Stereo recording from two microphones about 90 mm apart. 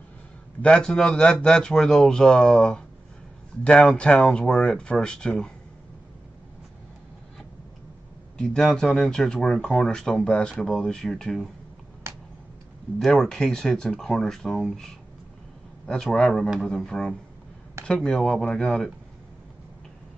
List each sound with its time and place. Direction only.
0.6 s speech: 10° left (ahead or behind)
8.4 s speech: 5° left (ahead or behind)
12.1 s a sound: 35° right (ahead or behind)
13.0 s speech: 5° left (ahead or behind)
15.9 s speech: 5° left (ahead or behind)